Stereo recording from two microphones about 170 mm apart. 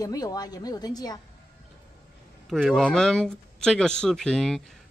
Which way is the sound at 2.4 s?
Centre (ahead or behind).